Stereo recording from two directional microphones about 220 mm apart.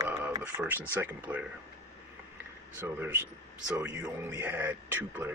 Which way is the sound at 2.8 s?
10° right (ahead or behind).